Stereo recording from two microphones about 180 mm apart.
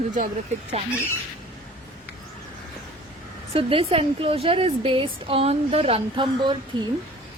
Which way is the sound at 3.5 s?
30° right (ahead or behind).